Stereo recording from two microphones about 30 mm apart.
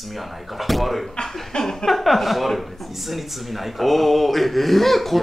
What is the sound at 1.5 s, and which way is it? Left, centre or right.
Speech, left.